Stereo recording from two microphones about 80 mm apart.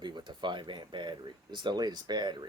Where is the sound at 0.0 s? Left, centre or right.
Right.